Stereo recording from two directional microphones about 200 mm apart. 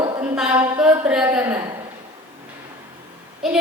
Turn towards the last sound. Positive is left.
turn(degrees=0)  # may be behind; listen again after turning